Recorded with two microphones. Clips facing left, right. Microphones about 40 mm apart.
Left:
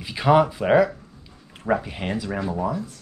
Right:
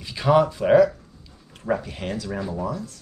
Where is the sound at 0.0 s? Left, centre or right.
Centre.